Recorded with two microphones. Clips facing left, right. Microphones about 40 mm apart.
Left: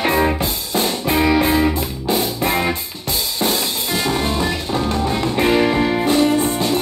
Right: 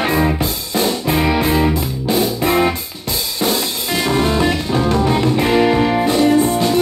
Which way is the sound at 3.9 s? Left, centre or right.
Right.